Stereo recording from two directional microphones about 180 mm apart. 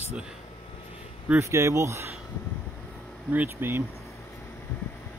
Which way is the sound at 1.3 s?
15° right (ahead or behind).